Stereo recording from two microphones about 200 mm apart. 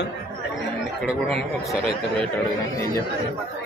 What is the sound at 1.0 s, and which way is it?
A man's voice, centre (ahead or behind).